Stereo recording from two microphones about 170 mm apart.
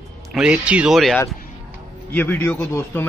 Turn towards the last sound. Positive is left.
turn(degrees=10)  # may be behind; listen again after turning